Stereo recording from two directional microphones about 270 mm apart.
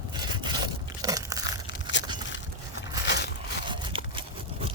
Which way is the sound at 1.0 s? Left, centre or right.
Centre.